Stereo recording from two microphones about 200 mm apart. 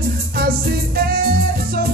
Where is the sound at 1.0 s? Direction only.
50° right (ahead or behind).